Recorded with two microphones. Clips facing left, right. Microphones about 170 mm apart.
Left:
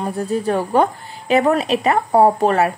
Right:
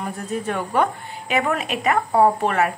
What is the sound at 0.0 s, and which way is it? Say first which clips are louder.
A woman's voice: left 6 dB; 35° left (ahead or behind).